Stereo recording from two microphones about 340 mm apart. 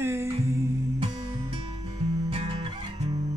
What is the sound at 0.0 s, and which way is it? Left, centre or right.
Music, centre.